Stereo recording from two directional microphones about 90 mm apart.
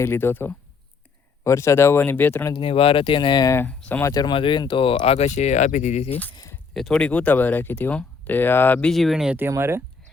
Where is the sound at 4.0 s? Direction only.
40° left (ahead or behind).